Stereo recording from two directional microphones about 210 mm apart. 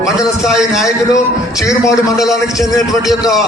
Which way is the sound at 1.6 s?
15° left (ahead or behind).